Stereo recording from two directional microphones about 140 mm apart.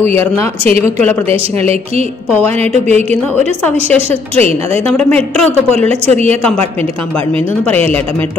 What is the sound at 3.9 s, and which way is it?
Speech, 45° right (ahead or behind).